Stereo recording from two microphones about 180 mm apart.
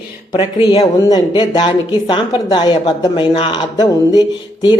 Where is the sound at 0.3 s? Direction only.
20° left (ahead or behind).